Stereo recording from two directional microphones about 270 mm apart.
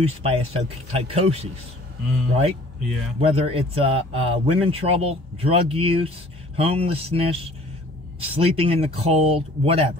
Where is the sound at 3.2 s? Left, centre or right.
Right.